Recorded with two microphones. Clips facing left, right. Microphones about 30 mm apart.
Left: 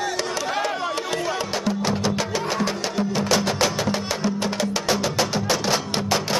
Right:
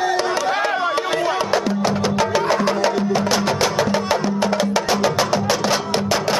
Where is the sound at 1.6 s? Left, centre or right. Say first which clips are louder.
Right 4 dB; centre.